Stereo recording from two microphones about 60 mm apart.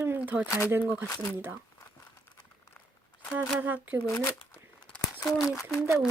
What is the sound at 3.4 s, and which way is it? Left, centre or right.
Speech, right.